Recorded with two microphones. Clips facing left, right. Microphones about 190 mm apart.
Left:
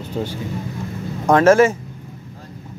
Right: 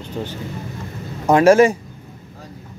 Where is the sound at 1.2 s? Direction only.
10° right (ahead or behind).